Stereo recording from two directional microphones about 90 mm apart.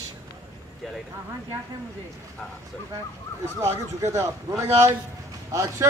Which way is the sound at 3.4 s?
30° right (ahead or behind).